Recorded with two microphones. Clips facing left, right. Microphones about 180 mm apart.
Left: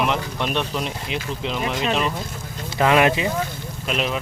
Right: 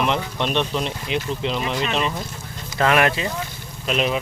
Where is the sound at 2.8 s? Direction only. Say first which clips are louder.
Left 2 dB; 15° left (ahead or behind).